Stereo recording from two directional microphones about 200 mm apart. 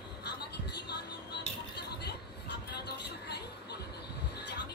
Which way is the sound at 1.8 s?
55° left (ahead or behind).